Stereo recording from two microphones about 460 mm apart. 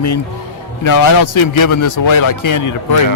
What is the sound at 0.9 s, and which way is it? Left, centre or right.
A man's voice, left.